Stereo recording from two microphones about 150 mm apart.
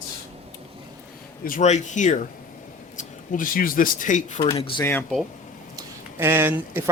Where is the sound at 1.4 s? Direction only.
65° left (ahead or behind).